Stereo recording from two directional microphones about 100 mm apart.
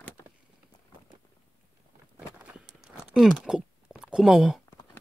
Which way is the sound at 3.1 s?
5° right (ahead or behind).